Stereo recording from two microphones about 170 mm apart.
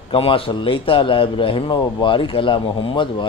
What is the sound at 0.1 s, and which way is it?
A man's voice, 35° left (ahead or behind).